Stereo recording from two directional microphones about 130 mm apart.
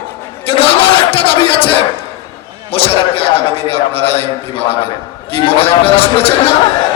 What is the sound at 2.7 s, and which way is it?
A man's voice, 45° left (ahead or behind).